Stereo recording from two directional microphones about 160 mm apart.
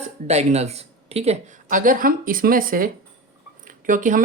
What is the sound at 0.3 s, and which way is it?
Speech, 40° right (ahead or behind).